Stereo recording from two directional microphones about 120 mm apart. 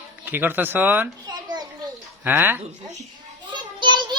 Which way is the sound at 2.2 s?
15° right (ahead or behind).